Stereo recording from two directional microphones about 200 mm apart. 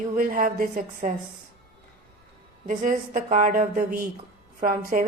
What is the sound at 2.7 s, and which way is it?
A woman's voice, 40° right (ahead or behind).